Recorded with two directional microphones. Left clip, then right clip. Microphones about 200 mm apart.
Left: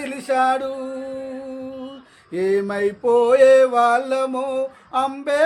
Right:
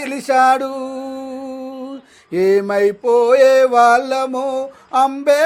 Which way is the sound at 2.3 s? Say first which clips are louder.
Right 6 dB; 35° right (ahead or behind).